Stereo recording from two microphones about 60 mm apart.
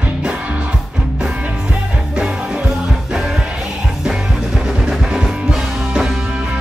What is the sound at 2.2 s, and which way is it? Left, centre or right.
Music, centre.